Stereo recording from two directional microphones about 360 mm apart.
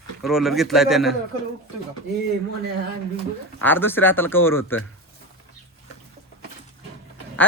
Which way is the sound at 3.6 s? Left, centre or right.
Centre.